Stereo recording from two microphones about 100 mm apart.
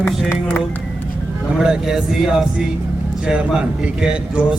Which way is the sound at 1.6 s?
5° right (ahead or behind).